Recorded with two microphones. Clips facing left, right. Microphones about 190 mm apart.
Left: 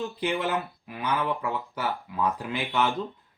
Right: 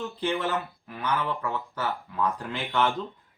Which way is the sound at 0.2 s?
10° left (ahead or behind).